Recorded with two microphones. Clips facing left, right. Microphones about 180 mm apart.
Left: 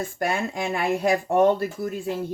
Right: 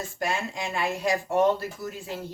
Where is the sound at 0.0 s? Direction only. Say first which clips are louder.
Left 4 dB; 55° left (ahead or behind).